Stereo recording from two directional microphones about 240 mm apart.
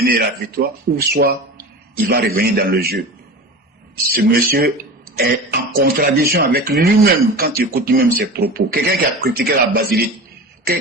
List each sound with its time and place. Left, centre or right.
0.0 s speech: right
4.1 s speech: right